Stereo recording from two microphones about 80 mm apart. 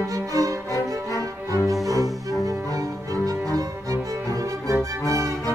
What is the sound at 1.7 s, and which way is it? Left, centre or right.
Music, right.